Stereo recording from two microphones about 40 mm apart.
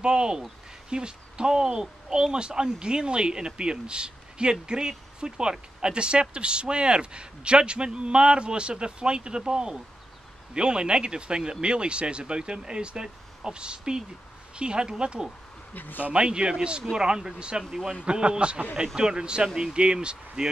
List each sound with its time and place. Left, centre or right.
0.0 s speech: right
15.7 s speech: left
16.1 s speech: right